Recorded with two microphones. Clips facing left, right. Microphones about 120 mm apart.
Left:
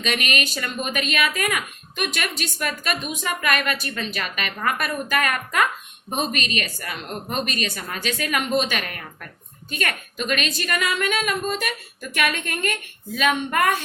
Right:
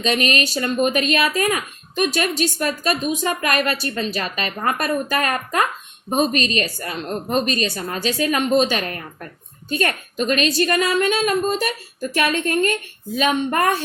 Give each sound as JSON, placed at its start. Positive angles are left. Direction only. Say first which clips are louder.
{"t": 0.0, "sound": "speech", "louder": "right 5 dB", "side_deg": -35}